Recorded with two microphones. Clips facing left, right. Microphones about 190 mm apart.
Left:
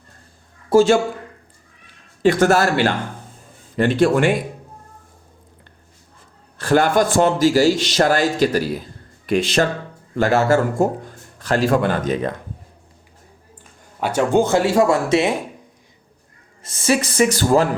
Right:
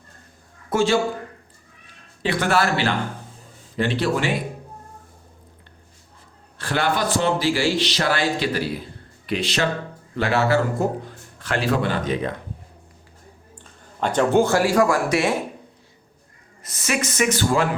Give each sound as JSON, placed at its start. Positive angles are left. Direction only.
{"t": 0.7, "sound": "speech", "side_deg": 30}
{"t": 2.2, "sound": "a man's voice", "side_deg": 45}
{"t": 6.6, "sound": "a man's voice", "side_deg": 45}
{"t": 14.0, "sound": "speech", "side_deg": 10}
{"t": 16.6, "sound": "speech", "side_deg": 30}